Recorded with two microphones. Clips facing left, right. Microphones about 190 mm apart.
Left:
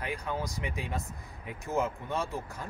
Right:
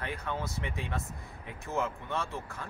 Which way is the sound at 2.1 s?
15° left (ahead or behind).